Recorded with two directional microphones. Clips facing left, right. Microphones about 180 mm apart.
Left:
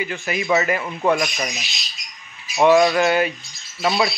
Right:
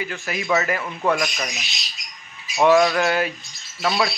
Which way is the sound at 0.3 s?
Centre (ahead or behind).